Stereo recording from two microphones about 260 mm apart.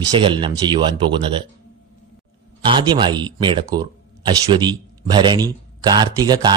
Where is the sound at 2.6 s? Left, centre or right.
Centre.